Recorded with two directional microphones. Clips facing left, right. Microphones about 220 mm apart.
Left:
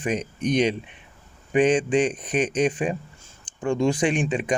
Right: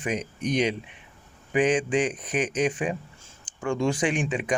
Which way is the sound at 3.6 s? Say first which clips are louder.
Left 3 dB; 20° left (ahead or behind).